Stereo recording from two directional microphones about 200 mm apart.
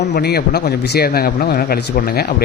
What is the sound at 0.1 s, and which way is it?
Speech, 55° left (ahead or behind).